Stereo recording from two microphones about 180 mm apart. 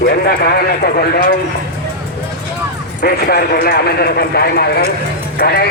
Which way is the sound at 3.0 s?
60° left (ahead or behind).